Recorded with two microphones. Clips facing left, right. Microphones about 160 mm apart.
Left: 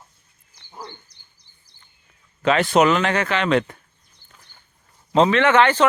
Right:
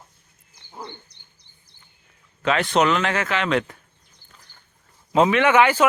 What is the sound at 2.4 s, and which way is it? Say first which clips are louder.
Speech: left 3 dB; centre (ahead or behind).